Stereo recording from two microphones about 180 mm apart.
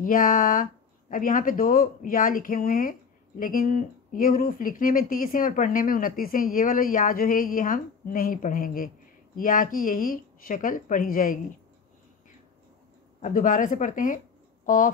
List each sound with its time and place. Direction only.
0.0 s speech: 50° left (ahead or behind)
13.2 s speech: 45° left (ahead or behind)